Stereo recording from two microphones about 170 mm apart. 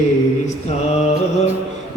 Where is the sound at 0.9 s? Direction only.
40° left (ahead or behind).